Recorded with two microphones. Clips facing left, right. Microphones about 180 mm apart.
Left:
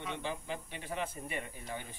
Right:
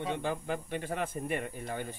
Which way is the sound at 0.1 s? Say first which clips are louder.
Right 4 dB; 50° right (ahead or behind).